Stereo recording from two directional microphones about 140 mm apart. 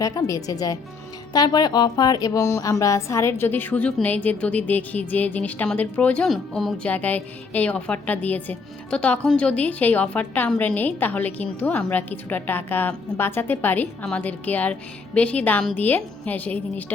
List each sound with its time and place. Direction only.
0.0 s a woman's voice: 25° left (ahead or behind)